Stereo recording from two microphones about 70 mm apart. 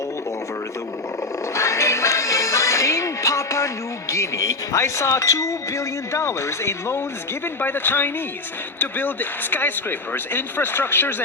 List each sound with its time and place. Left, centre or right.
1.5 s music: left
4.1 s speech: left
7.4 s speech: left